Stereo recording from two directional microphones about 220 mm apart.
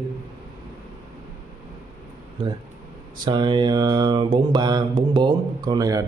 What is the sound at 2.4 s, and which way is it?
Mantra, 25° right (ahead or behind).